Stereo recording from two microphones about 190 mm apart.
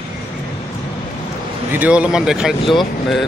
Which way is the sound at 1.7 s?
10° right (ahead or behind).